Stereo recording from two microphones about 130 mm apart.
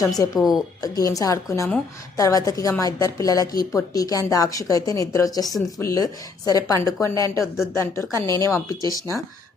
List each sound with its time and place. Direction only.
0.0 s a woman's voice: 30° left (ahead or behind)
0.3 s speech: 5° right (ahead or behind)
0.8 s a woman's voice: 25° left (ahead or behind)